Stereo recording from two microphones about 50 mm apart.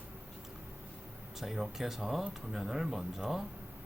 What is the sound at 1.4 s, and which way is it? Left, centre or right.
Speech, centre.